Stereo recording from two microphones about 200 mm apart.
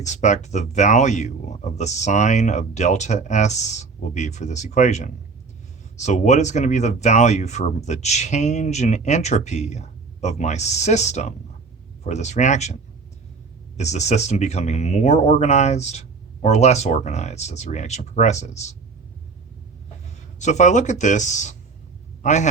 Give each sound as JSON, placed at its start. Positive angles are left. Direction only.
{"t": 0.0, "sound": "speech", "side_deg": 35}
{"t": 13.7, "sound": "speech", "side_deg": 35}
{"t": 20.4, "sound": "a man's voice", "side_deg": 35}